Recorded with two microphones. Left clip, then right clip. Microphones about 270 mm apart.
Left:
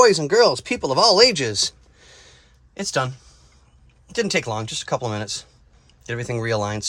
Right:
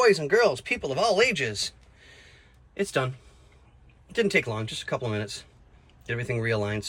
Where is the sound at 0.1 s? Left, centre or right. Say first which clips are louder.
Left 5 dB; centre.